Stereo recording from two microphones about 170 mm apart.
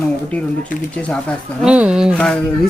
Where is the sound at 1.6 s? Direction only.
5° right (ahead or behind).